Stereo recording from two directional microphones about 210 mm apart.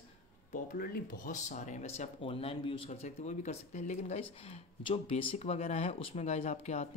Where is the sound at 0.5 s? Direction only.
45° left (ahead or behind).